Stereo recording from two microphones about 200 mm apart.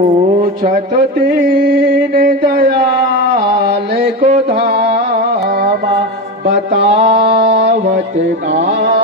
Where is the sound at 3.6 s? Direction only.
55° right (ahead or behind).